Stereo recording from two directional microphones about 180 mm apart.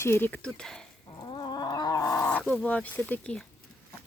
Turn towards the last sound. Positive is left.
turn(degrees=5)  # may be behind; listen again after turning